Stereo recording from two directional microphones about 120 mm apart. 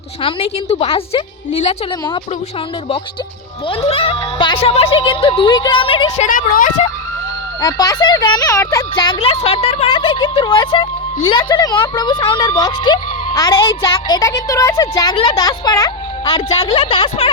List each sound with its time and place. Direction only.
0.2 s a woman's voice: 50° left (ahead or behind)
3.7 s speech: 55° left (ahead or behind); by 5.8 s 35° left (ahead or behind)
5.8 s speech: 45° left (ahead or behind)
6.2 s speech: 90° left
7.6 s a woman's voice: 30° left (ahead or behind)
9.4 s a woman's voice: 55° left (ahead or behind); by 15.9 s 35° left (ahead or behind)
16.8 s speech: 50° left (ahead or behind)